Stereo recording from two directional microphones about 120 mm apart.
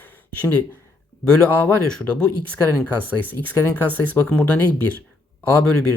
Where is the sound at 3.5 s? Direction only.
25° left (ahead or behind).